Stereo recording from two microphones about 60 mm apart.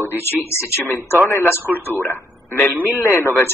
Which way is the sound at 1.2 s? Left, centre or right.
Left.